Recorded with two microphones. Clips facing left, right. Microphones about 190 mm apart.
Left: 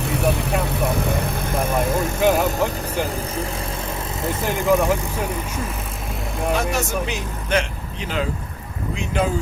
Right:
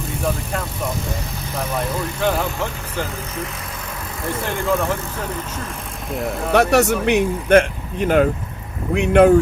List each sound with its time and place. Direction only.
0.1 s vehicle: 70° left (ahead or behind)
1.8 s speech: 50° left (ahead or behind)
2.2 s speech: 15° left (ahead or behind)
4.6 s speech: 15° left (ahead or behind)
6.5 s speech: 70° right (ahead or behind); by 8.3 s 55° right (ahead or behind)
9.0 s speech: 65° right (ahead or behind)